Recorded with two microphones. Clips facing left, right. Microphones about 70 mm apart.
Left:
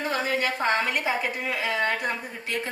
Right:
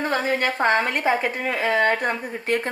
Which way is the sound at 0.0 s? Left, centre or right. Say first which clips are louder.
Right 4 dB; right.